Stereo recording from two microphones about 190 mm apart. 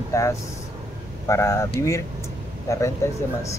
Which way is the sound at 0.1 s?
15° left (ahead or behind).